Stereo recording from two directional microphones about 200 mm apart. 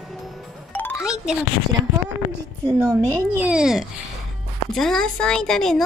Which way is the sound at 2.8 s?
15° right (ahead or behind).